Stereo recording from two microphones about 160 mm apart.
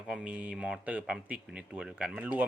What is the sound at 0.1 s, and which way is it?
Speech, 5° right (ahead or behind).